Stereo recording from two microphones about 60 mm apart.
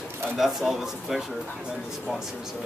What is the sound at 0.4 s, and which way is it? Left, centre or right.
Speech, centre.